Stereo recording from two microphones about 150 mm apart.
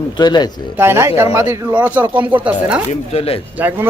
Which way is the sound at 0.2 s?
30° left (ahead or behind).